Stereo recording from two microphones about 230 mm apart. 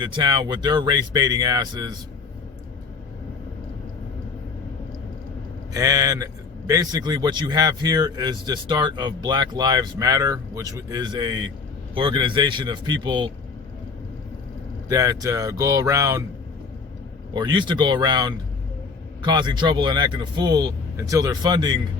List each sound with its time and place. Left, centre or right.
0.0 s a man's voice: centre
5.7 s a man's voice: centre
14.8 s a man's voice: centre
17.3 s a man's voice: centre